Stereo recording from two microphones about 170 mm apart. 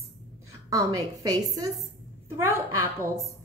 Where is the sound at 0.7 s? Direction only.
20° right (ahead or behind).